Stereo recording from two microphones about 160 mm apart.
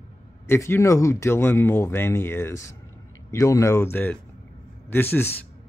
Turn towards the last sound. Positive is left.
turn(degrees=15)  # may be behind; listen again after turning